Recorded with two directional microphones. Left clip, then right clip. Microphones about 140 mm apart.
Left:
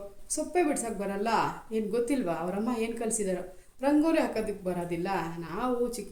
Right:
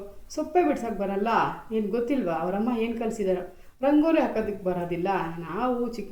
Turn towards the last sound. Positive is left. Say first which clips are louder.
# right 2 dB
turn(degrees=25)  # may be behind; listen again after turning